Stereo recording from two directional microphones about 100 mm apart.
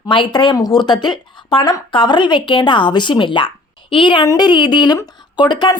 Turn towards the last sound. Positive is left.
turn(degrees=50)  # may be behind; listen again after turning